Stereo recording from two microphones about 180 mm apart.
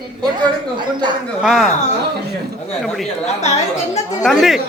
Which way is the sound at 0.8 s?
25° right (ahead or behind).